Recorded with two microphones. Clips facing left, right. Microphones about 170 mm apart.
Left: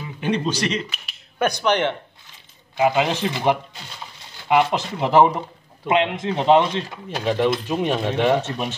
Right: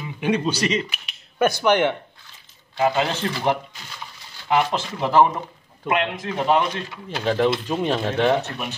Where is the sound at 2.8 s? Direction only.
15° left (ahead or behind).